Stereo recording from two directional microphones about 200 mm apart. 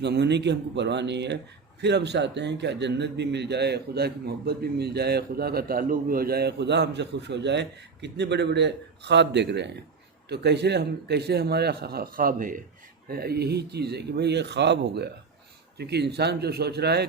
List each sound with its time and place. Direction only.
0.0 s a man's voice: 60° right (ahead or behind)